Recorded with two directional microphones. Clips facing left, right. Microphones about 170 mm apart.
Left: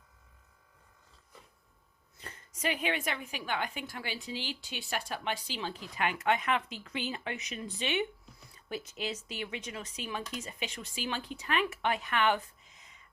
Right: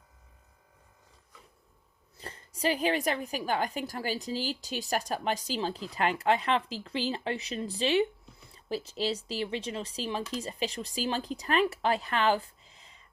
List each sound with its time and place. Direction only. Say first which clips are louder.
2.1 s a woman's voice: right 5 dB; 35° right (ahead or behind)